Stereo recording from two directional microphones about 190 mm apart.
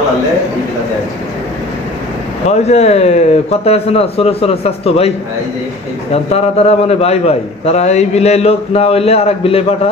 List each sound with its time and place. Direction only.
2.4 s a man's voice: 35° left (ahead or behind)
6.1 s a man's voice: 30° left (ahead or behind)